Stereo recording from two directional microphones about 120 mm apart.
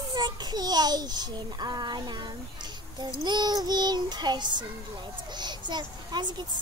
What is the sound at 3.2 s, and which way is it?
A child's voice, 35° right (ahead or behind).